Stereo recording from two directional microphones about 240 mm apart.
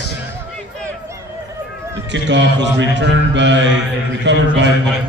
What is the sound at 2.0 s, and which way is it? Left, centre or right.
A man's voice, right.